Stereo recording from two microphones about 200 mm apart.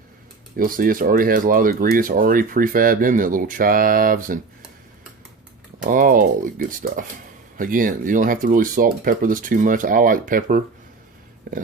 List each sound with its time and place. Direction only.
0.5 s speech: 45° right (ahead or behind)
5.8 s speech: 45° right (ahead or behind)